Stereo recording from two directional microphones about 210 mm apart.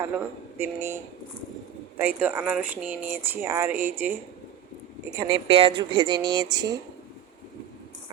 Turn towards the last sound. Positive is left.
turn(degrees=-20)  # may be behind; listen again after turning